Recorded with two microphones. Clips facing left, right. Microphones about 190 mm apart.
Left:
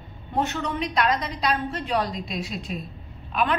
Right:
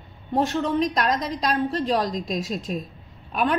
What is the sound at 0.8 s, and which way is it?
A woman's voice, 40° right (ahead or behind).